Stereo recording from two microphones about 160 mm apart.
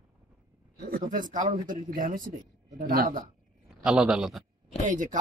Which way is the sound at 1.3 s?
50° right (ahead or behind).